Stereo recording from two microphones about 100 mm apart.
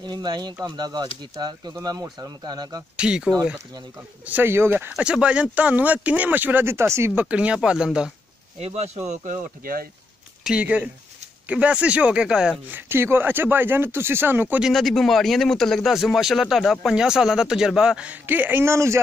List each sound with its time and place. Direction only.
0.0 s speech: 45° right (ahead or behind)
3.0 s speech: 10° right (ahead or behind)
4.3 s speech: 20° right (ahead or behind)
4.9 s speech: 10° right (ahead or behind); by 7.1 s 25° right (ahead or behind)
7.2 s speech: 15° right (ahead or behind)
8.5 s speech: 90° right
10.4 s speech: 10° right (ahead or behind)
12.7 s speech: 25° right (ahead or behind)
14.6 s speech: centre (ahead or behind); by 18.9 s 25° right (ahead or behind)